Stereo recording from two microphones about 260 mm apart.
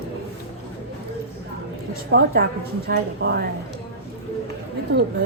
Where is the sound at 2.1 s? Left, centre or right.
Right.